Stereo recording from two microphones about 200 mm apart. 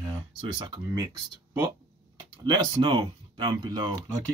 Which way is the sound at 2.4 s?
20° right (ahead or behind).